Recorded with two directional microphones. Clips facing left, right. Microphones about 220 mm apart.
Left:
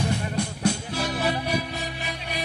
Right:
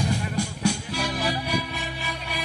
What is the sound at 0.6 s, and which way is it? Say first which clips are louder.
Music: left 1 dB; 20° left (ahead or behind).